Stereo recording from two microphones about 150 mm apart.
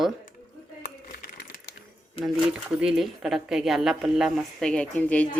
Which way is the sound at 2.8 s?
5° right (ahead or behind).